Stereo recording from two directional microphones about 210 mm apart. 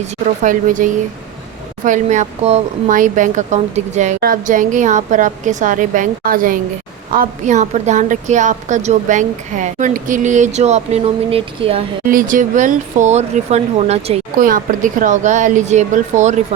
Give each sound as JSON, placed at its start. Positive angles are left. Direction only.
{"t": 0.4, "sound": "speech", "side_deg": -40}
{"t": 12.0, "sound": "speech", "side_deg": -40}